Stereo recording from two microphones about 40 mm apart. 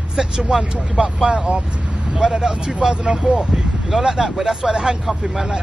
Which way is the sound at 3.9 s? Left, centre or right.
Centre.